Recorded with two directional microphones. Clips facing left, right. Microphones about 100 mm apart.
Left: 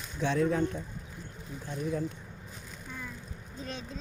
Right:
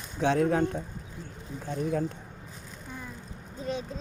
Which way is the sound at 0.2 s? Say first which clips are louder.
Right 3 dB; 55° right (ahead or behind).